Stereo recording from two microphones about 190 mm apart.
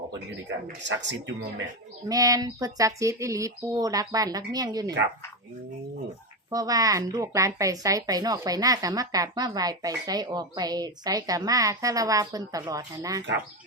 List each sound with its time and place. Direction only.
0.9 s speech: 70° right (ahead or behind)
2.0 s a woman's voice: 20° right (ahead or behind)
6.5 s a woman's voice: 20° right (ahead or behind)